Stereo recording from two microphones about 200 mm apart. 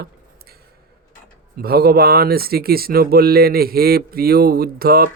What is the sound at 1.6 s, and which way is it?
Speech, 50° right (ahead or behind).